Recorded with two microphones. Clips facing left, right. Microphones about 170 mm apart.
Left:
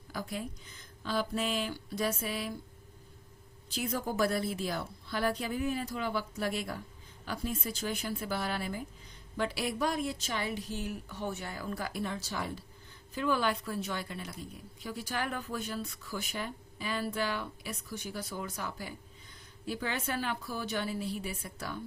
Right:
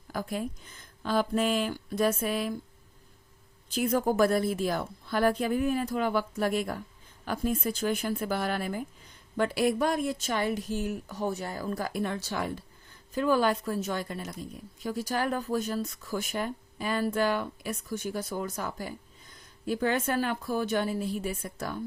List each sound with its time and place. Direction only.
0.1 s speech: 50° right (ahead or behind)
3.7 s speech: 50° right (ahead or behind)
13.1 s speech: 40° right (ahead or behind)